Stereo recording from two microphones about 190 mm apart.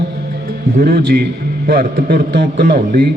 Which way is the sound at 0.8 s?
55° right (ahead or behind).